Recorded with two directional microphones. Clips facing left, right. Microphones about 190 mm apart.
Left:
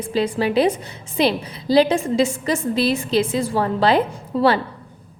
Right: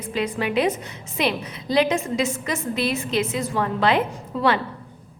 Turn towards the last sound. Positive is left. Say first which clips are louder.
# left 4 dB
turn(degrees=35)  # may be behind; listen again after turning